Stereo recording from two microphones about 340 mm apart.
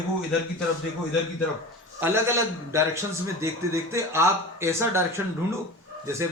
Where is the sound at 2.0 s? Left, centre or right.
Centre.